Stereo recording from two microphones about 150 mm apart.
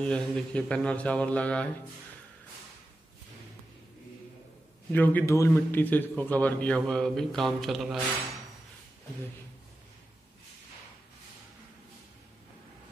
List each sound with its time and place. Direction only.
0.0 s a man's voice: 5° left (ahead or behind)
4.9 s a man's voice: 10° left (ahead or behind)